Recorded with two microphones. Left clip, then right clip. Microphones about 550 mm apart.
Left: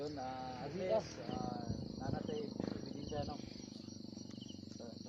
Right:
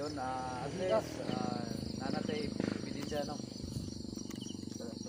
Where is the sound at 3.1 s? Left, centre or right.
Left.